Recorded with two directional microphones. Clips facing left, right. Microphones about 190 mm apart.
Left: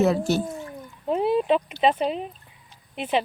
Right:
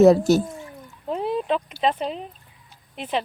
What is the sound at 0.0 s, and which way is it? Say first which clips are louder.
Speech: right 7 dB; 40° right (ahead or behind).